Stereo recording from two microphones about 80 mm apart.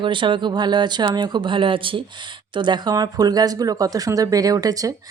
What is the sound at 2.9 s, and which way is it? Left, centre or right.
Speech, right.